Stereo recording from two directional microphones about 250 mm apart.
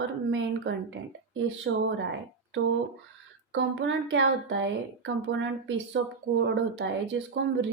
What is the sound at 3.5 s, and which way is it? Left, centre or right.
Speech, right.